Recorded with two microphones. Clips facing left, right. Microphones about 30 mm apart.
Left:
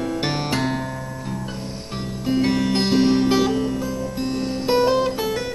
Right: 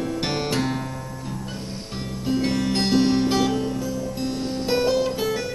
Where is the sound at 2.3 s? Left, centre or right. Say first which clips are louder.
Left 3 dB; centre.